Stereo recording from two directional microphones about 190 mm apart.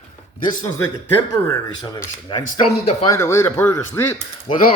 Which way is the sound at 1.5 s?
15° left (ahead or behind).